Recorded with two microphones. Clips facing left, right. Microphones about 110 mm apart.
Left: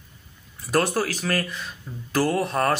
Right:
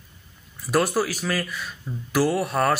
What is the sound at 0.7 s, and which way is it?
Speech, 10° right (ahead or behind).